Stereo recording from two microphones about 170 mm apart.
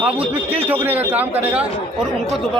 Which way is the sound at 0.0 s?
10° right (ahead or behind).